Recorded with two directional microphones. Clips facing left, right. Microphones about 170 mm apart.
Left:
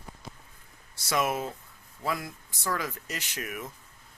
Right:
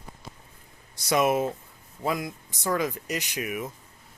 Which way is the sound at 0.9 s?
20° right (ahead or behind).